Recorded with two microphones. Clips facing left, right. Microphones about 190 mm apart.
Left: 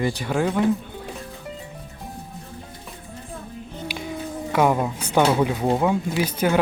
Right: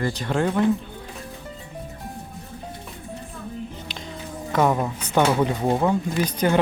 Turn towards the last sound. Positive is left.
turn(degrees=5)  # may be behind; listen again after turning